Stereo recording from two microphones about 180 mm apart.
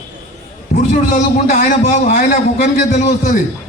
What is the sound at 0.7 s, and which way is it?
A man's voice, 45° left (ahead or behind).